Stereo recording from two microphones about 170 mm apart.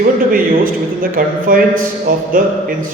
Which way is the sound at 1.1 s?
55° right (ahead or behind).